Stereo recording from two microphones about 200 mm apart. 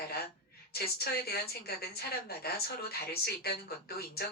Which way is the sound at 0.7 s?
50° left (ahead or behind).